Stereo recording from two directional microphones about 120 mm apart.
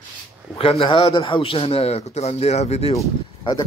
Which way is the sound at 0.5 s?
50° left (ahead or behind).